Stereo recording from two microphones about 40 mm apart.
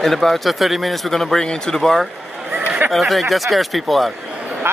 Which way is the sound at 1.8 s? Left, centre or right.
Centre.